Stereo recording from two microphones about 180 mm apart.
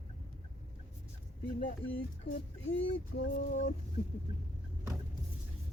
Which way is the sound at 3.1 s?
90° left.